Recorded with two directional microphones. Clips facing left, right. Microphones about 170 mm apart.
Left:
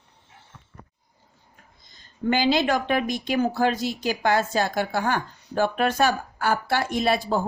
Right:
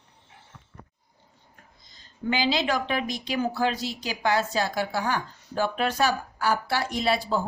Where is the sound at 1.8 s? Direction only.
50° left (ahead or behind).